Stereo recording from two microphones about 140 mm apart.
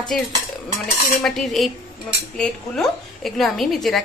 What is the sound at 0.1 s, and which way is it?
A woman's voice, centre (ahead or behind).